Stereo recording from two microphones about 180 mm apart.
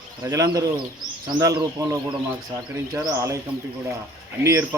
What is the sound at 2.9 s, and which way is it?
Speech, 15° right (ahead or behind).